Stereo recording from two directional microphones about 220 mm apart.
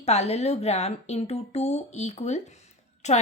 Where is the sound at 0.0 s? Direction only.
30° left (ahead or behind).